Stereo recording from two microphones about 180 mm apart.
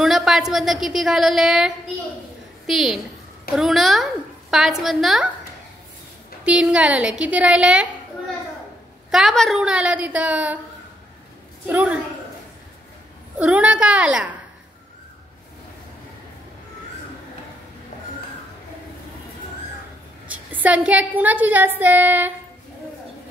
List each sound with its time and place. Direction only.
0.0 s a woman's voice: centre (ahead or behind)
6.4 s a woman's voice: 5° right (ahead or behind)
9.1 s a woman's voice: centre (ahead or behind)
11.7 s a woman's voice: 5° right (ahead or behind)
13.4 s a woman's voice: 5° right (ahead or behind)
20.2 s a woman's voice: 10° right (ahead or behind)